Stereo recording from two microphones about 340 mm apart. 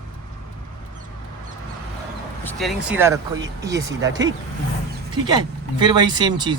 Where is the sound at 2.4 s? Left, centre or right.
Centre.